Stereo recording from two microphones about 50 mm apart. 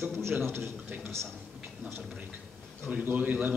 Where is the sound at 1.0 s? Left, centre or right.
Right.